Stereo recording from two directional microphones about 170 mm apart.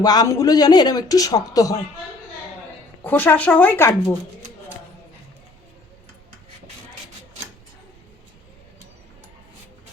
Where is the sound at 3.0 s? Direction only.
10° left (ahead or behind).